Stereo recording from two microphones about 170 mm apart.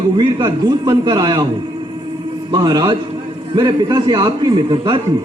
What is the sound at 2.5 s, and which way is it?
A man's voice, 25° right (ahead or behind).